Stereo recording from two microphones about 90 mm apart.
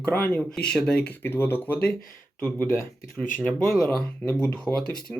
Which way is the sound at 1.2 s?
25° left (ahead or behind).